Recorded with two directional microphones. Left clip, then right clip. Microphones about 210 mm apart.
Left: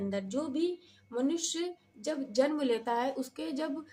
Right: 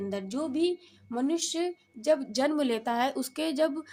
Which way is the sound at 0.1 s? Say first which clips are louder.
Right 1 dB; 40° right (ahead or behind).